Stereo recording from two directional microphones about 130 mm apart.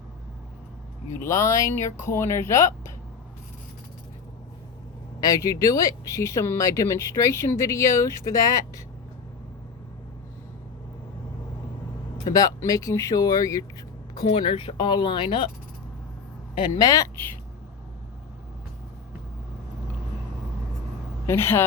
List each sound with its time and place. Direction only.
1.1 s speech: 20° left (ahead or behind)
5.2 s speech: 25° left (ahead or behind)
12.2 s speech: 25° left (ahead or behind)
14.3 s speech: 45° left (ahead or behind)
16.6 s speech: 35° left (ahead or behind)
21.2 s speech: 20° left (ahead or behind)